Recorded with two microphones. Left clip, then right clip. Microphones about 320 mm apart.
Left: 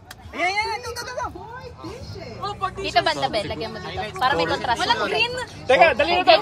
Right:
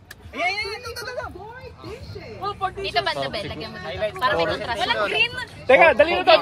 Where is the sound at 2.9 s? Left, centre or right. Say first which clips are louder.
Left 5 dB; left.